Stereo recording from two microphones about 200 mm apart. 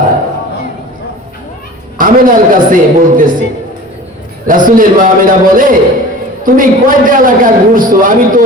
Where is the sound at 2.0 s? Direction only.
40° right (ahead or behind).